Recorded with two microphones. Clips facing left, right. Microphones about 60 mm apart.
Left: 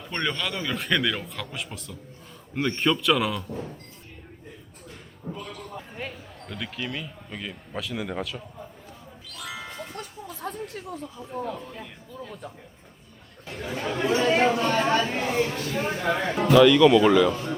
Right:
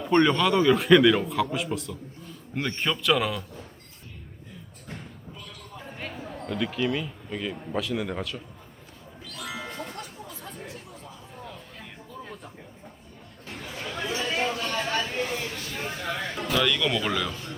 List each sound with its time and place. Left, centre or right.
0.0 s a man's voice: centre
6.0 s speech: centre
9.2 s music: centre
10.2 s chatter: left
14.1 s speech: left
16.6 s a man's voice: centre